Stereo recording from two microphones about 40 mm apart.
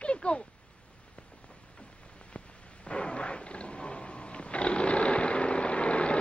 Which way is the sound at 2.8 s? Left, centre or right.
Left.